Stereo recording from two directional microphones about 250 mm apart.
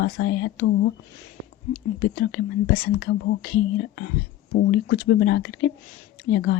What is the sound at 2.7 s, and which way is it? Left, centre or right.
Speech, left.